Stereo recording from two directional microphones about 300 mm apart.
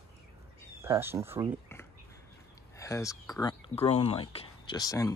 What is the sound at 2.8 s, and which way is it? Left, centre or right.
Speech, centre.